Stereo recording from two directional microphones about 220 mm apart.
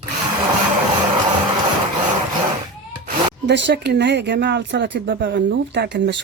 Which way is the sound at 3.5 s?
50° right (ahead or behind).